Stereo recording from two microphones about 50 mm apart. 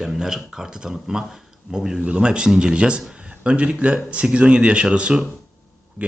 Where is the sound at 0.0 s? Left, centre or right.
Centre.